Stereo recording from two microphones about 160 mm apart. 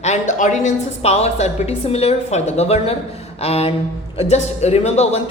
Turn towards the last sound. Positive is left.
turn(degrees=45)  # may be behind; listen again after turning